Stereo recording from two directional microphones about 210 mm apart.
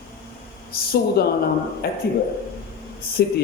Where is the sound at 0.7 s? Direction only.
45° left (ahead or behind).